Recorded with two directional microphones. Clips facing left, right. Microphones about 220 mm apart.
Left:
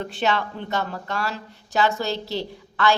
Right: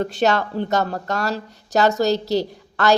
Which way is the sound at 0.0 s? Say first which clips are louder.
Right 5 dB; 40° right (ahead or behind).